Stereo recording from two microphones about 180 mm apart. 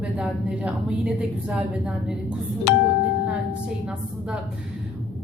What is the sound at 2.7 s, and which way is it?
Speech, 75° left (ahead or behind).